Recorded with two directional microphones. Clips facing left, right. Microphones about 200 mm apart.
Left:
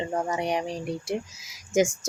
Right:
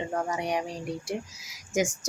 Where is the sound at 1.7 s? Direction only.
25° left (ahead or behind).